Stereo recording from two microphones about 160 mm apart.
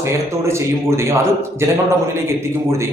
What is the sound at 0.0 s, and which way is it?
A man's voice, 15° right (ahead or behind).